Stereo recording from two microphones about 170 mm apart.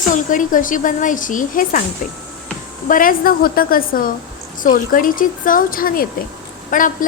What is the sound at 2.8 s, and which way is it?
A woman's voice, 55° left (ahead or behind).